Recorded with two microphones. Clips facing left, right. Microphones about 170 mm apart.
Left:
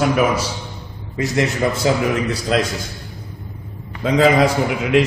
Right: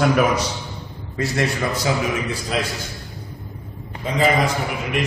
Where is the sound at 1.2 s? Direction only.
20° left (ahead or behind).